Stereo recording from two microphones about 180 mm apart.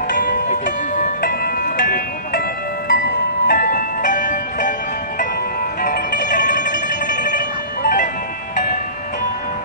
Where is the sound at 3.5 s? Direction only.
50° left (ahead or behind).